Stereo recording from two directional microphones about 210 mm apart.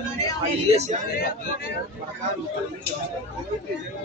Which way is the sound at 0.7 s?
35° right (ahead or behind).